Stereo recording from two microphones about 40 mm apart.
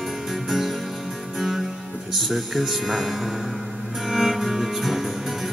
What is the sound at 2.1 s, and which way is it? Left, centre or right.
Speech, centre.